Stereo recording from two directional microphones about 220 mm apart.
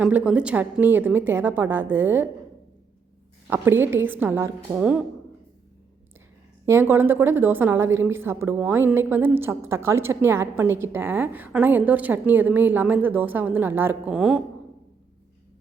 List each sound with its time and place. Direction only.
0.0 s a woman's voice: 5° right (ahead or behind)
3.4 s a woman's voice: 10° right (ahead or behind)
6.7 s a woman's voice: 10° right (ahead or behind)